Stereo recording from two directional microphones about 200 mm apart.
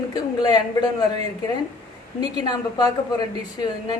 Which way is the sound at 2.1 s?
20° left (ahead or behind).